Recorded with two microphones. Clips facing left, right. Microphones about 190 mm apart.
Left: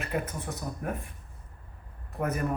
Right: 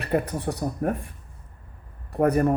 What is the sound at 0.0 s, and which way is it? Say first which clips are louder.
Speech: right 8 dB; 35° right (ahead or behind).